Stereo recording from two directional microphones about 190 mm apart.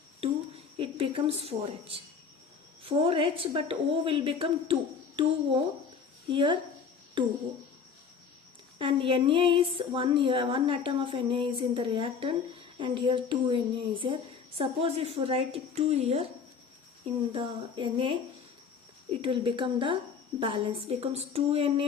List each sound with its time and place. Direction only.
0.8 s a woman's voice: 30° right (ahead or behind)
8.8 s a woman's voice: 25° right (ahead or behind)
17.3 s a woman's voice: 25° right (ahead or behind)
19.2 s a woman's voice: 25° right (ahead or behind)